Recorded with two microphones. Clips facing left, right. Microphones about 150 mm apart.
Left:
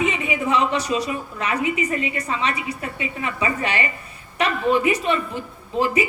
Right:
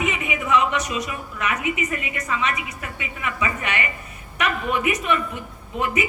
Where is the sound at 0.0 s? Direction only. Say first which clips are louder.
Left 3 dB; 30° left (ahead or behind).